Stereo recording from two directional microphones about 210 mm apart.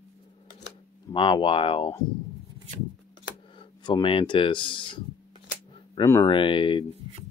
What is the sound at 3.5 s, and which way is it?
Speech, 20° left (ahead or behind).